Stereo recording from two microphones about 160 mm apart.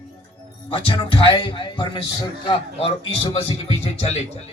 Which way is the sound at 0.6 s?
35° left (ahead or behind).